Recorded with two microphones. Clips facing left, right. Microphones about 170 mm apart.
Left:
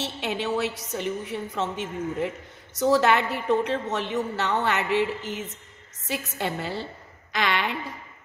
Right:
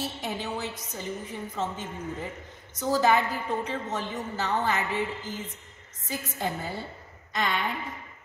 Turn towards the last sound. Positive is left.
turn(degrees=85)